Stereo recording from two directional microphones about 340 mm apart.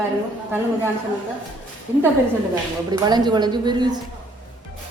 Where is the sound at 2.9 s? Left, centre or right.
Centre.